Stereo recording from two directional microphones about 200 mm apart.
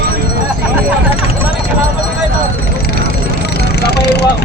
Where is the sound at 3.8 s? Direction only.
55° left (ahead or behind).